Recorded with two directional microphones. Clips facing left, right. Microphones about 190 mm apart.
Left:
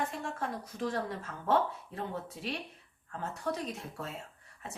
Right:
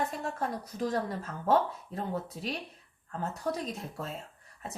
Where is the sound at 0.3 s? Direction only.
40° right (ahead or behind).